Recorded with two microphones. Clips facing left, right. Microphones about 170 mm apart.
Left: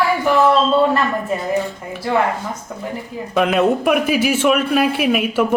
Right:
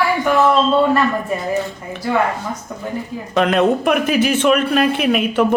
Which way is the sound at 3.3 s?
5° left (ahead or behind).